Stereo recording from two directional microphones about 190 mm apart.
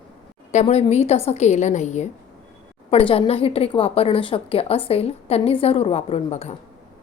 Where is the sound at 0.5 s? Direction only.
35° left (ahead or behind).